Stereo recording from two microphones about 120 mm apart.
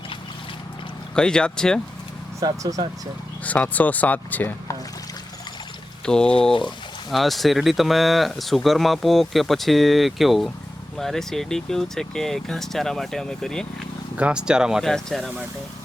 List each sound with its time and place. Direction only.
1.1 s speech: 5° left (ahead or behind)
2.4 s speech: 30° right (ahead or behind)
3.4 s speech: 10° left (ahead or behind)
6.1 s speech: 5° left (ahead or behind)
6.5 s speech: 40° left (ahead or behind)
7.1 s speech: centre (ahead or behind)
14.2 s speech: 10° right (ahead or behind)